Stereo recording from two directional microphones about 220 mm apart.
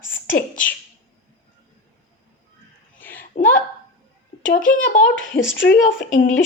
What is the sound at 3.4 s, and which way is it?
Speech, 45° left (ahead or behind).